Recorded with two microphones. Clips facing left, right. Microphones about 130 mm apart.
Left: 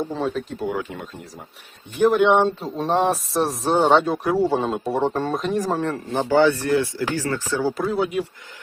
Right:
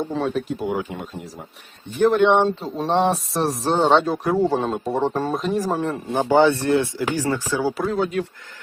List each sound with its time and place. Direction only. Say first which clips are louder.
0.1 s speech: right 2 dB; centre (ahead or behind)
0.5 s speech: right 2 dB; 15° right (ahead or behind)
2.0 s speech: even; 10° left (ahead or behind); by 6.0 s 10° right (ahead or behind)
6.1 s speech: right 1 dB; 20° right (ahead or behind)
7.9 s speech: even; 10° left (ahead or behind)